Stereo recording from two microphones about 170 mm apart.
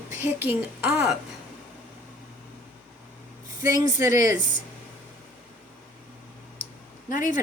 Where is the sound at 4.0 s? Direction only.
15° right (ahead or behind).